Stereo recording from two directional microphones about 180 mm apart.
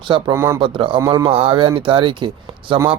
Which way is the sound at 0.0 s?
25° right (ahead or behind).